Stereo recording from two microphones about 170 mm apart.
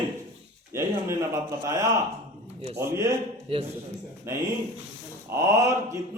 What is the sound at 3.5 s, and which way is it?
Speech, 30° right (ahead or behind).